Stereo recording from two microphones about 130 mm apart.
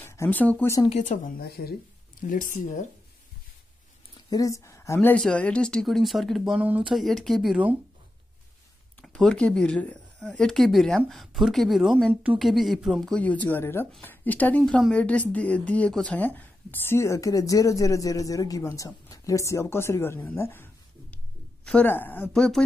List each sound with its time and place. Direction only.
0.0 s speech: 20° left (ahead or behind)
0.8 s speech: 70° left (ahead or behind)
2.2 s speech: 90° left
4.3 s a woman's voice: 25° left (ahead or behind); by 7.6 s centre (ahead or behind)
9.0 s speech: 5° left (ahead or behind)
12.1 s a woman's voice: 10° right (ahead or behind)
12.4 s a woman's voice: centre (ahead or behind)